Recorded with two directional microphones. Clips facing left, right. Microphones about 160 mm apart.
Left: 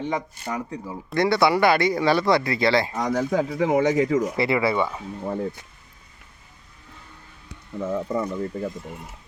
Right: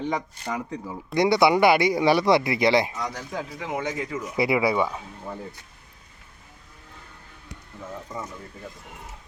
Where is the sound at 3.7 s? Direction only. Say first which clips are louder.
Left 9 dB; 70° left (ahead or behind).